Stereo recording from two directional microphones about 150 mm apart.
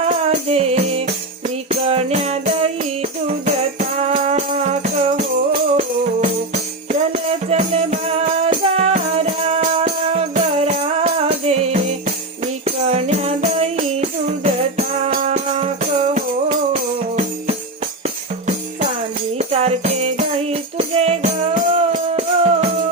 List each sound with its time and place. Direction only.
0.0 s music: 45° right (ahead or behind)
7.5 s music: 50° right (ahead or behind)
16.7 s music: 50° right (ahead or behind)
19.4 s music: 45° right (ahead or behind)